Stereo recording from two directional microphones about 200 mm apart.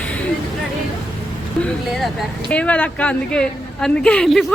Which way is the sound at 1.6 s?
Centre (ahead or behind).